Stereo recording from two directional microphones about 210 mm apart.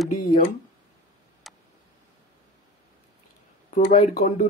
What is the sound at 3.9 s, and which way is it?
Speech, 35° left (ahead or behind).